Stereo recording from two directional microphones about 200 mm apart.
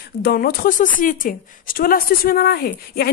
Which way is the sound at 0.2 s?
50° left (ahead or behind).